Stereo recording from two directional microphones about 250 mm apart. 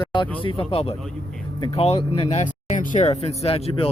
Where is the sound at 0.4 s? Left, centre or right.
Left.